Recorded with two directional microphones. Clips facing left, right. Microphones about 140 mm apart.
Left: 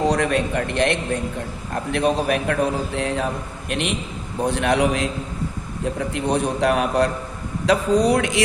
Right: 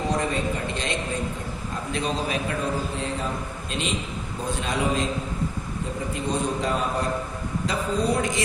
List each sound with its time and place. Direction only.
0.1 s a man's voice: 75° left (ahead or behind)
3.7 s a man's voice: 65° left (ahead or behind)